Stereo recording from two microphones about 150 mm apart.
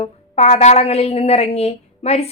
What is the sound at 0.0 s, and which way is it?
A woman's voice, 45° left (ahead or behind).